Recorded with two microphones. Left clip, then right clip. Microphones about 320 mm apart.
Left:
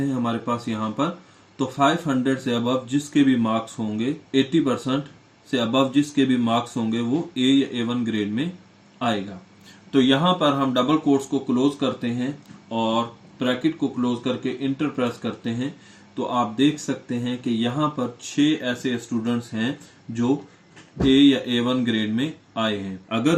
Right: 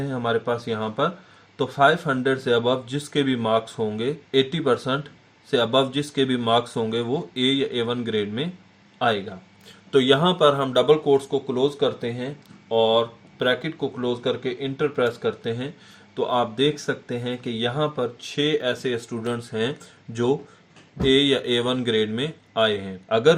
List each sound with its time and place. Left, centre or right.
0.2 s speech: right
9.9 s speech: right
21.0 s speech: right